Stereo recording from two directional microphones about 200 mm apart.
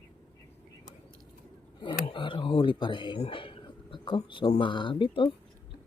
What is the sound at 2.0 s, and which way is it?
Speech, 25° left (ahead or behind).